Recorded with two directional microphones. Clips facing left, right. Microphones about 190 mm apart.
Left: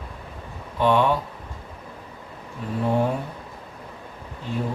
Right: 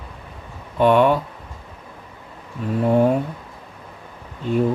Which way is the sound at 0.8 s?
55° right (ahead or behind).